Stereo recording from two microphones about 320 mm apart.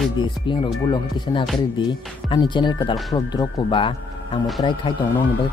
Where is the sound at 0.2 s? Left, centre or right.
Centre.